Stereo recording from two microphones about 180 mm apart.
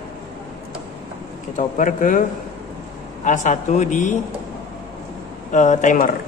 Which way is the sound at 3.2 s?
40° left (ahead or behind).